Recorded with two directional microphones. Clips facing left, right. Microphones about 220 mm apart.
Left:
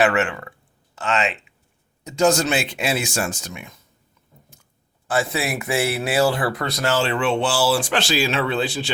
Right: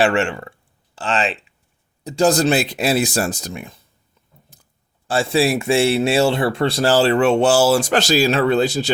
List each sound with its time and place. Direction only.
0.0 s speech: 30° right (ahead or behind)
4.5 s clicking: 35° right (ahead or behind)
5.0 s speech: 30° right (ahead or behind)